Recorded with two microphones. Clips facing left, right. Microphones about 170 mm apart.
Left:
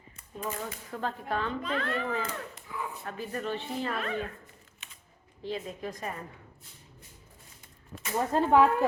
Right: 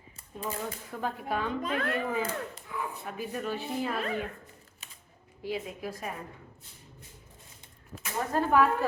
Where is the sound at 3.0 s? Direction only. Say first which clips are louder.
Left 2 dB; 5° right (ahead or behind).